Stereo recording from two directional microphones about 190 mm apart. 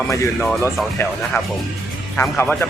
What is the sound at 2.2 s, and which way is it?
Speech, 5° left (ahead or behind).